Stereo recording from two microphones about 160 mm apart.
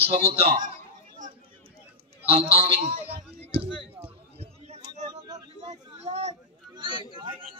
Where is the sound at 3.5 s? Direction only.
35° right (ahead or behind).